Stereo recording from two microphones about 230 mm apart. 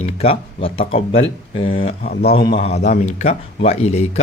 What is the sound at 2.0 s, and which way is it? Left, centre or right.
Speech, left.